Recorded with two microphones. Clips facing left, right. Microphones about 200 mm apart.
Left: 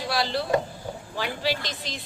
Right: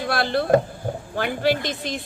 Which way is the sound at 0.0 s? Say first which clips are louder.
Right 4 dB; 55° right (ahead or behind).